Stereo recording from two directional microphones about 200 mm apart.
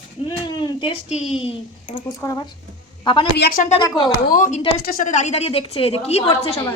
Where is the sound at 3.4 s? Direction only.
55° left (ahead or behind).